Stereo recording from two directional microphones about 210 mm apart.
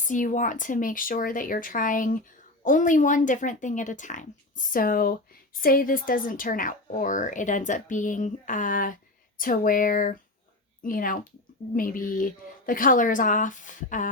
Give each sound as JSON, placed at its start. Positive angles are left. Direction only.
{"t": 0.0, "sound": "a woman's voice", "side_deg": 40}